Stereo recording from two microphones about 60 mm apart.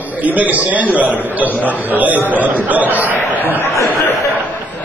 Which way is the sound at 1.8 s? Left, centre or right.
Right.